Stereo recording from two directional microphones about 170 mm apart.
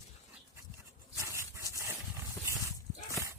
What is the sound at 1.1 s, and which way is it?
Dog, 15° right (ahead or behind).